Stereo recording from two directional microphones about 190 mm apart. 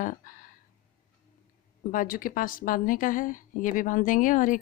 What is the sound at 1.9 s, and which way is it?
A woman's voice, 45° left (ahead or behind).